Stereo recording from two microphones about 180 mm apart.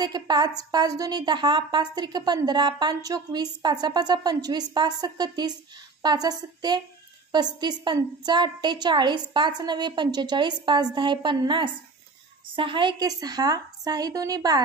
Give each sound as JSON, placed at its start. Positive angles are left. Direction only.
{"t": 0.0, "sound": "a woman's voice", "side_deg": -20}